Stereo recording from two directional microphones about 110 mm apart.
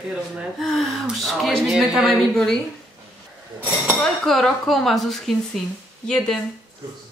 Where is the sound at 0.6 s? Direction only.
Centre (ahead or behind).